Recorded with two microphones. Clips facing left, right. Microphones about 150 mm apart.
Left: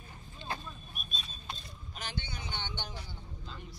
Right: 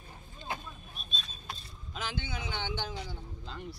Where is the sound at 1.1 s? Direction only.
5° left (ahead or behind).